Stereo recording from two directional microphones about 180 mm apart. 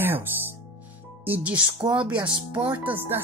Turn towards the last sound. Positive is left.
turn(degrees=-10)  # may be behind; listen again after turning